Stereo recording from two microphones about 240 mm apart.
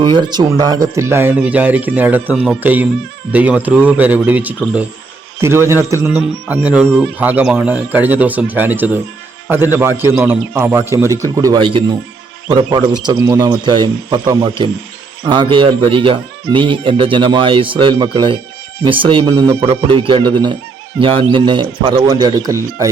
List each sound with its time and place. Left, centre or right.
0.0 s a man's voice: centre
10.0 s a man's voice: centre